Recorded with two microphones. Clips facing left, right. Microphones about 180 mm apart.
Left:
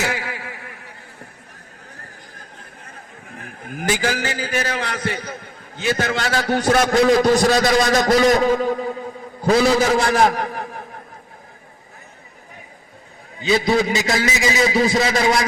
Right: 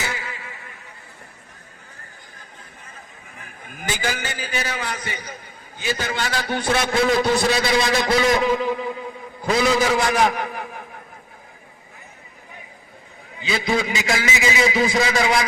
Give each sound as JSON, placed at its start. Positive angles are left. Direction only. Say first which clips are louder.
{"t": 0.0, "sound": "a sound", "louder": "left 5 dB", "side_deg": 65}
{"t": 3.3, "sound": "a man's voice", "louder": "left 9 dB", "side_deg": 60}
{"t": 13.4, "sound": "a man's voice", "louder": "left 5 dB", "side_deg": 40}